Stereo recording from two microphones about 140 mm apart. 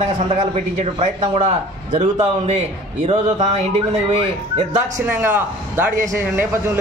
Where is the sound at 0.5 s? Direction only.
50° right (ahead or behind).